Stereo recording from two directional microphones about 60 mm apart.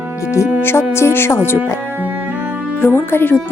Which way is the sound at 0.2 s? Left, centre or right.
Left.